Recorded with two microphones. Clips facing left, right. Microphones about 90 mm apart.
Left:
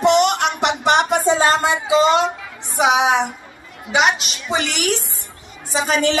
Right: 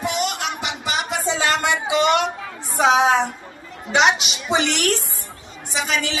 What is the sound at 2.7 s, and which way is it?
Speech, 15° left (ahead or behind).